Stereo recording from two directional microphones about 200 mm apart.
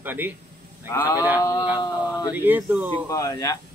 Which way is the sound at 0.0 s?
10° right (ahead or behind).